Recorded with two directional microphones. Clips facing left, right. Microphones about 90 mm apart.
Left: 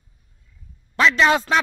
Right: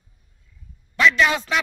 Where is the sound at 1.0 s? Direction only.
35° left (ahead or behind).